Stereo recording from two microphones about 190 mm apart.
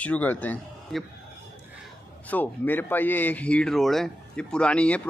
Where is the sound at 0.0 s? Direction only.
10° left (ahead or behind).